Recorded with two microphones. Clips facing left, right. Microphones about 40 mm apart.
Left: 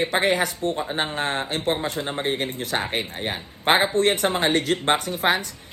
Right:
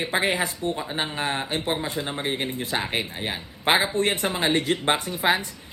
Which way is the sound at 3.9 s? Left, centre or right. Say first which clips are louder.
Left 4 dB; left.